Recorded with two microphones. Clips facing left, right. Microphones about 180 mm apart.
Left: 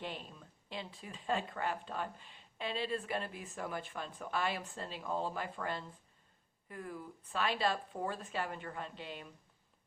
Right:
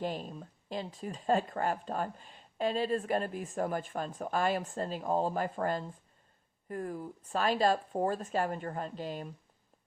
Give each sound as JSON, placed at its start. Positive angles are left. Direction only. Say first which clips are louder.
{"t": 0.0, "sound": "speech", "louder": "right 8 dB", "side_deg": -40}